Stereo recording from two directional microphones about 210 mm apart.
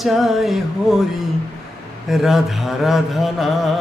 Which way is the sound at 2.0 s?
Centre (ahead or behind).